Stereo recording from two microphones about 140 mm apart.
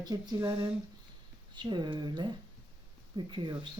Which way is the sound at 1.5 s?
30° right (ahead or behind).